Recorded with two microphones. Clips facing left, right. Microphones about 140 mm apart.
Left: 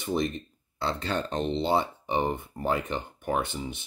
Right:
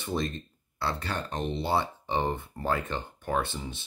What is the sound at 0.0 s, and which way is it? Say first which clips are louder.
Speech: left 3 dB; 15° left (ahead or behind).